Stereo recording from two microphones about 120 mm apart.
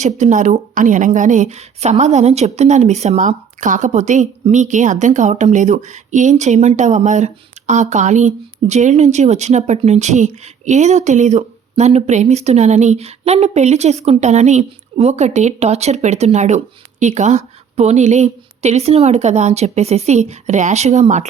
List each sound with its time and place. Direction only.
0.0 s a woman's voice: 85° right